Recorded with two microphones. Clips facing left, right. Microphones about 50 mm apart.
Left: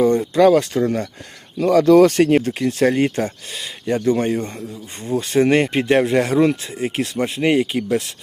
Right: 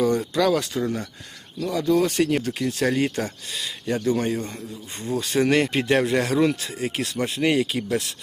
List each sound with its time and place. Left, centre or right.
0.3 s speech: left
1.6 s speech: left
2.3 s speech: left